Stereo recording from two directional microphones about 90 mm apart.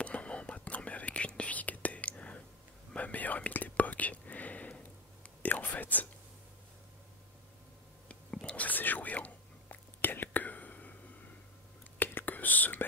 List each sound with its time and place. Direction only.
0.0 s whispering: 15° left (ahead or behind)
8.1 s whispering: 10° left (ahead or behind)
12.0 s whispering: 20° left (ahead or behind)